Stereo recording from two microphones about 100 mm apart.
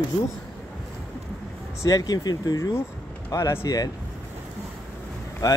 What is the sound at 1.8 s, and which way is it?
Speech, 40° left (ahead or behind).